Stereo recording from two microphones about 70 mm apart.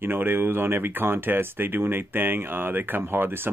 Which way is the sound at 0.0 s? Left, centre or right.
Right.